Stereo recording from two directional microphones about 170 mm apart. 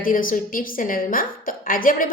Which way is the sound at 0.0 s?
55° left (ahead or behind).